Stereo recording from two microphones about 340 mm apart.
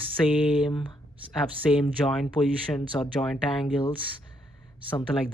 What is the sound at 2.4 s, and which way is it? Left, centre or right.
Speech, centre.